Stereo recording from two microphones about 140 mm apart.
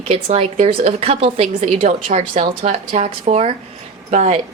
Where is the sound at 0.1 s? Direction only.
50° right (ahead or behind).